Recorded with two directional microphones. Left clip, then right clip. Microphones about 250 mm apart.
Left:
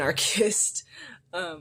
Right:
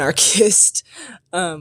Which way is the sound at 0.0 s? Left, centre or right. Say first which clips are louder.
Right 9 dB; right.